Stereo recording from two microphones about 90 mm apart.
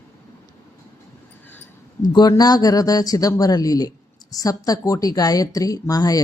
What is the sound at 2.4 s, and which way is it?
A man's voice, 45° left (ahead or behind).